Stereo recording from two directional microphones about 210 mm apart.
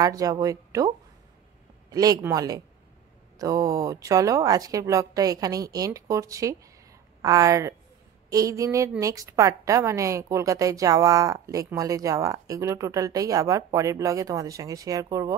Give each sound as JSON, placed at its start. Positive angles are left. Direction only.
{"t": 0.0, "sound": "a woman's voice", "side_deg": -15}